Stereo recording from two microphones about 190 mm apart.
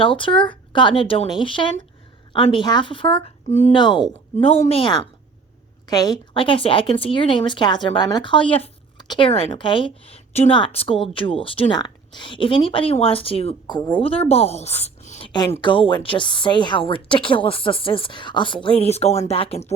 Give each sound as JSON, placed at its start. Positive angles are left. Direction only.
{"t": 0.0, "sound": "a woman's voice", "side_deg": 25}
{"t": 15.3, "sound": "speech", "side_deg": 20}